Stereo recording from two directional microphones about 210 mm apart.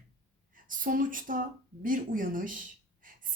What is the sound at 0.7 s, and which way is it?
Speech, 40° right (ahead or behind).